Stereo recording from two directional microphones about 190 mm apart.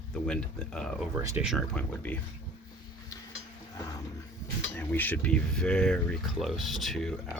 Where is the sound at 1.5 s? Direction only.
5° left (ahead or behind).